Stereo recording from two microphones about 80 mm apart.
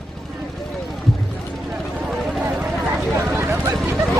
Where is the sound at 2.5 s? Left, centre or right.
Centre.